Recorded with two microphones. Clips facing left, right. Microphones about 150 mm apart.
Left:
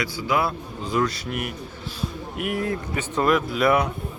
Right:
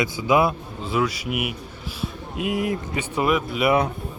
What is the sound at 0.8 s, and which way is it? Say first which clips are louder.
A man's voice: right 1 dB; 5° right (ahead or behind).